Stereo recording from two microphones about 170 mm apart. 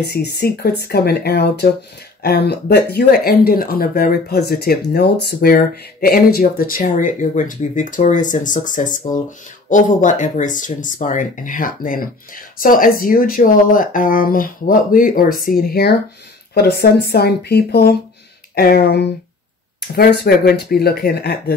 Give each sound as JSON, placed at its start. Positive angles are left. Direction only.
{"t": 0.0, "sound": "speech", "side_deg": 75}